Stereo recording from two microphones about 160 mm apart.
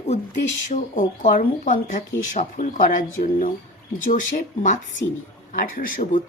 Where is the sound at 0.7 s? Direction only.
55° left (ahead or behind).